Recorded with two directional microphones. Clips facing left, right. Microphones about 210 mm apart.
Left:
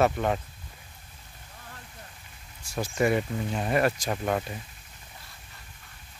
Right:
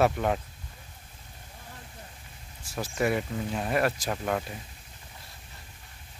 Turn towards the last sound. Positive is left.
turn(degrees=5)  # may be behind; listen again after turning